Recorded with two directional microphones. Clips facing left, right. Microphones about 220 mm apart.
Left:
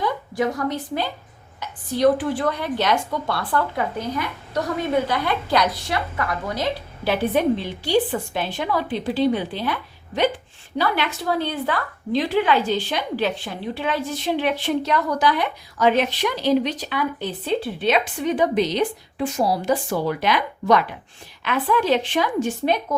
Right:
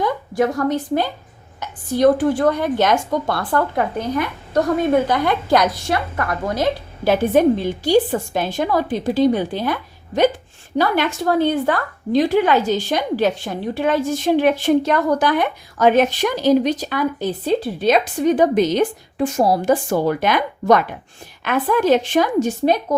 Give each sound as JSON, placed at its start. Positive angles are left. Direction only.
{"t": 0.0, "sound": "a woman's voice", "side_deg": -50}
{"t": 10.8, "sound": "a woman's voice", "side_deg": -50}